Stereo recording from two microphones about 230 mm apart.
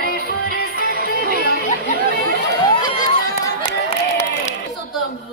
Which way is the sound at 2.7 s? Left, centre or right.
Centre.